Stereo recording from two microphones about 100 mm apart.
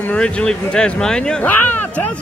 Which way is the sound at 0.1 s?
10° left (ahead or behind).